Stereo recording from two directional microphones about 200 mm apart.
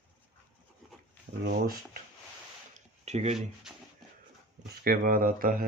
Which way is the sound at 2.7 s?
35° right (ahead or behind).